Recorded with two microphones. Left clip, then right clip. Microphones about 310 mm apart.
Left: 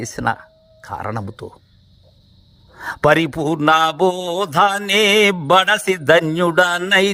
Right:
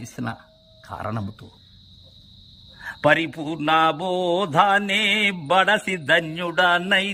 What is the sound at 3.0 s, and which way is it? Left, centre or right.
A man's voice, centre.